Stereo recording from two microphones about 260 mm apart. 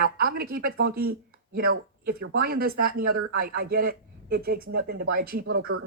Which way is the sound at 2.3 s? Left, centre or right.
Right.